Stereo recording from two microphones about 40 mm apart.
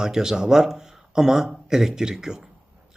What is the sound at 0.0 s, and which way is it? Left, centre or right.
A man's voice, centre.